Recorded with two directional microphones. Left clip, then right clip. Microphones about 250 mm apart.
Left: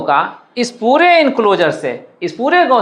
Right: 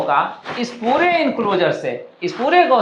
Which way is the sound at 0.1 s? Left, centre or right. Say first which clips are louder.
Left 3 dB; left.